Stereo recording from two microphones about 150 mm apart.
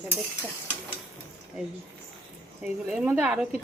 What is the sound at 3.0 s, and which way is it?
Speech, 10° right (ahead or behind).